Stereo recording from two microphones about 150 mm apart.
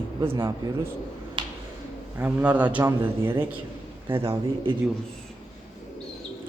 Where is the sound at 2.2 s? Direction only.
10° right (ahead or behind).